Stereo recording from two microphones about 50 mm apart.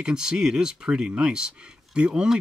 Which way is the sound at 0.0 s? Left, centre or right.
Centre.